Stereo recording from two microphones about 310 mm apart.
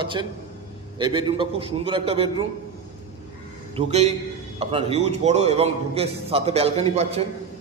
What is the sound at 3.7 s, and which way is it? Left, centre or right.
A man's voice, right.